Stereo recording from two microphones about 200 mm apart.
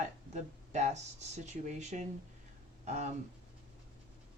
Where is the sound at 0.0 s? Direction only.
35° right (ahead or behind).